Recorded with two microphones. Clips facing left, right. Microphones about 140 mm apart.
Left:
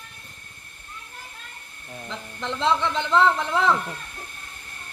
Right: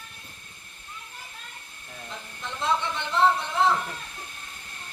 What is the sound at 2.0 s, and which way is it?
A man's voice, 90° left.